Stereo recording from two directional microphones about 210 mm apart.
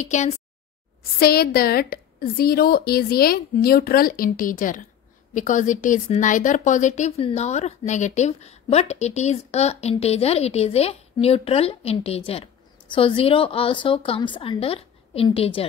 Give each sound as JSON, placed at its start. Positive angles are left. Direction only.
{"t": 0.0, "sound": "speech", "side_deg": 35}
{"t": 1.2, "sound": "a woman's voice", "side_deg": 45}